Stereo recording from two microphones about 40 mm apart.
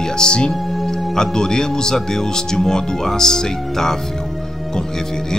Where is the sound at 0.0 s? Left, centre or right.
Centre.